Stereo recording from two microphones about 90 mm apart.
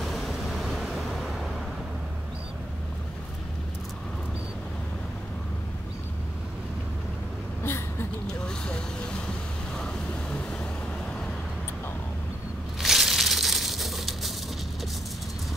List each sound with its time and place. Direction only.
0.0 s vehicle: centre (ahead or behind)
7.6 s a sound: 25° left (ahead or behind)
8.5 s vehicle: 10° left (ahead or behind)
12.8 s crushing: 5° right (ahead or behind)